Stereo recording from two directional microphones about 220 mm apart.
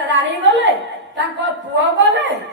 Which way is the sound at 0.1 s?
55° right (ahead or behind).